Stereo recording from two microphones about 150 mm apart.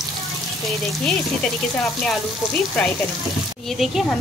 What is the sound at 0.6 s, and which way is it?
Speech, 5° left (ahead or behind).